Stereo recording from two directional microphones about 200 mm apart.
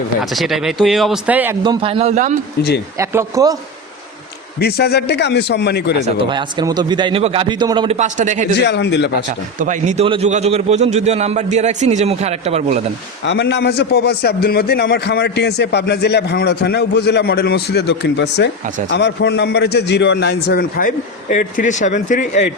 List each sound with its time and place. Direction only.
0.2 s speech: centre (ahead or behind)
1.6 s a man's voice: 25° right (ahead or behind)
3.0 s a man's voice: 15° right (ahead or behind)
4.6 s a man's voice: 55° left (ahead or behind)
6.1 s a man's voice: 25° right (ahead or behind)
7.9 s a man's voice: 40° right (ahead or behind)
8.5 s a man's voice: 60° left (ahead or behind)
9.6 s a man's voice: 40° right (ahead or behind)
13.2 s a man's voice: 60° left (ahead or behind); by 22.4 s 40° left (ahead or behind)